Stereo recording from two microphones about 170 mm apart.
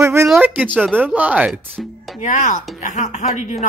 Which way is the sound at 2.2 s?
45° left (ahead or behind).